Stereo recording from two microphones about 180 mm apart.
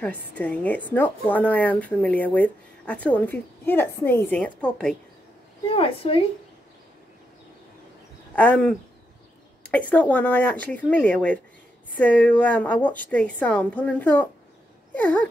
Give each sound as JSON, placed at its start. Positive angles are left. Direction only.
{"t": 0.0, "sound": "a woman's voice", "side_deg": 10}
{"t": 5.7, "sound": "a woman's voice", "side_deg": 30}
{"t": 8.4, "sound": "a woman's voice", "side_deg": 5}
{"t": 14.9, "sound": "a sound", "side_deg": 10}